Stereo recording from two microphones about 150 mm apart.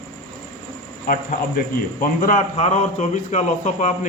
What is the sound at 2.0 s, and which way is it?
Speech, 70° left (ahead or behind).